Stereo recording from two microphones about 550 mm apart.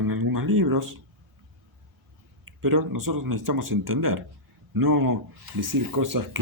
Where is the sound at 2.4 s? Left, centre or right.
Right.